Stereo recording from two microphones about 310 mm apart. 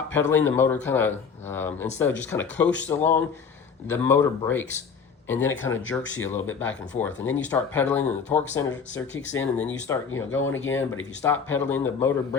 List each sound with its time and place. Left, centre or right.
0.1 s speech: centre
9.1 s speech: left
9.6 s speech: centre
10.4 s speech: left
11.2 s speech: centre